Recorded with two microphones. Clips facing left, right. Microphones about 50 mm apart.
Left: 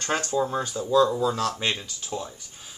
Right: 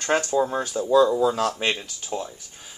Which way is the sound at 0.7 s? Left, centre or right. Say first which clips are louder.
Right 4 dB; right.